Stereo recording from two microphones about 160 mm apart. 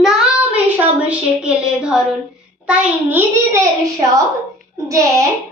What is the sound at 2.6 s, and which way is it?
Speech, 15° right (ahead or behind).